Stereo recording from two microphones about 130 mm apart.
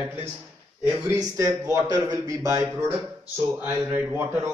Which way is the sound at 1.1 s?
20° right (ahead or behind).